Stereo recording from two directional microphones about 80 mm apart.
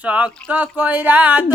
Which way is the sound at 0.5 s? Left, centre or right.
Centre.